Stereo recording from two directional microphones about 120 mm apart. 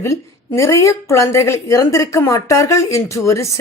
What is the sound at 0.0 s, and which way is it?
Speech, 25° left (ahead or behind).